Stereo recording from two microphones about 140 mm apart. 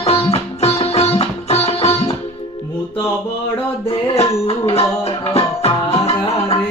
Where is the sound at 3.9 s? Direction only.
40° left (ahead or behind).